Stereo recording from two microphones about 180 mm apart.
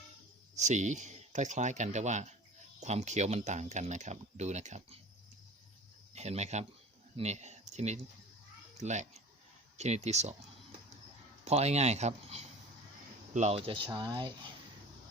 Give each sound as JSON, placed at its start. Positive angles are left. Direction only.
{"t": 0.5, "sound": "speech", "side_deg": -40}
{"t": 6.1, "sound": "speech", "side_deg": -35}
{"t": 11.4, "sound": "speech", "side_deg": -35}